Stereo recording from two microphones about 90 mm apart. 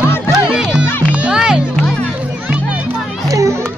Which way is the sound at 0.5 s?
10° right (ahead or behind).